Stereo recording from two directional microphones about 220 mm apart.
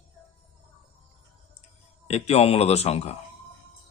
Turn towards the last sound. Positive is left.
turn(degrees=30)  # may be behind; listen again after turning